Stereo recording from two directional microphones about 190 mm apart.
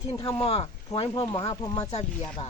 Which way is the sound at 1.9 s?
35° left (ahead or behind).